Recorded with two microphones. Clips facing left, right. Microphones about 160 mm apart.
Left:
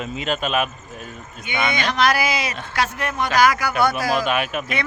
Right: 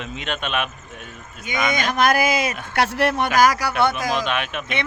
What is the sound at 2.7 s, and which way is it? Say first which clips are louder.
Speech: right 5 dB; 70° right (ahead or behind).